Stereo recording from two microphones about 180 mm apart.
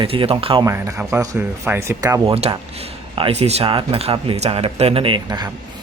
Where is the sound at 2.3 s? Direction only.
35° right (ahead or behind).